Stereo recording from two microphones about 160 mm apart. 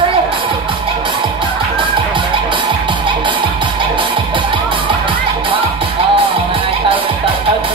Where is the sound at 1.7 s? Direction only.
30° right (ahead or behind).